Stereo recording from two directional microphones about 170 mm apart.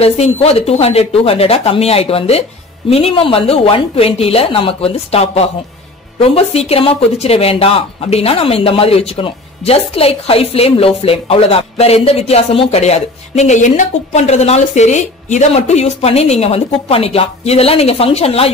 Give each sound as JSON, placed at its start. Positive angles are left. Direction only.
{"t": 0.0, "sound": "speech", "side_deg": 35}